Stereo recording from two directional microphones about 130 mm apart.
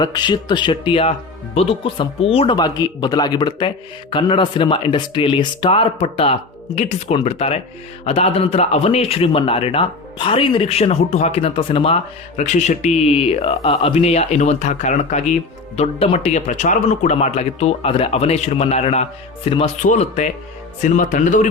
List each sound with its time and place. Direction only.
0.0 s a man's voice: 35° left (ahead or behind)
2.6 s a man's voice: 30° left (ahead or behind)
12.4 s a man's voice: 65° left (ahead or behind); by 19.7 s 50° left (ahead or behind)
19.8 s speech: 65° left (ahead or behind)
20.8 s speech: 75° left (ahead or behind)